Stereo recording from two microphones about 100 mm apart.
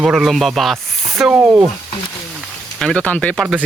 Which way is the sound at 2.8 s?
10° left (ahead or behind).